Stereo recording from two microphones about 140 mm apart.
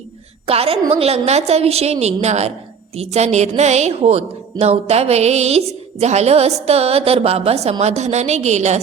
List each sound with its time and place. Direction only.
0.4 s a woman's voice: 45° right (ahead or behind)